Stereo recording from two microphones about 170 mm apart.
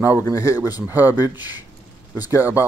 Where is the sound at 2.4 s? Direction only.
10° right (ahead or behind).